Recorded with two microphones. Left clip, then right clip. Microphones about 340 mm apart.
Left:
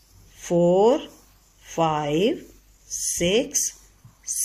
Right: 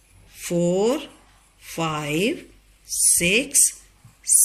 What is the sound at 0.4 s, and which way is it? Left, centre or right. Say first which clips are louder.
A woman's voice: left 3 dB; left.